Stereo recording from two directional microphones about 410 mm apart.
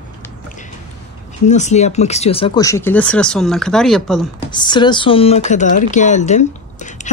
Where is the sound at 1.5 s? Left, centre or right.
Centre.